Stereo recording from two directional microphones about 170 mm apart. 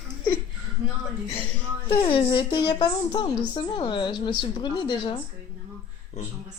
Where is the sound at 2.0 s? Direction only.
25° left (ahead or behind).